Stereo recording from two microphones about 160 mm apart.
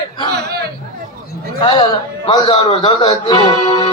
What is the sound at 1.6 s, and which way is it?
Speech, 30° left (ahead or behind).